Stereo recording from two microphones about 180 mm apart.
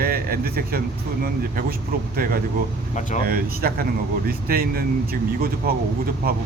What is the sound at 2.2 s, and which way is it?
Speech, 55° right (ahead or behind).